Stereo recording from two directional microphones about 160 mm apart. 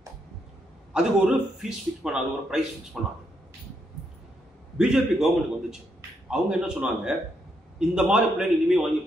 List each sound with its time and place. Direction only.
0.9 s a man's voice: 5° right (ahead or behind)
4.7 s a man's voice: 5° right (ahead or behind)